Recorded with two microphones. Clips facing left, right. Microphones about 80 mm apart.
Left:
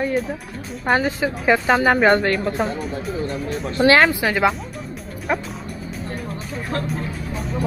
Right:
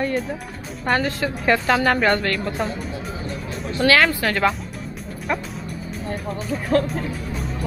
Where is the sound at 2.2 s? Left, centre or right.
Left.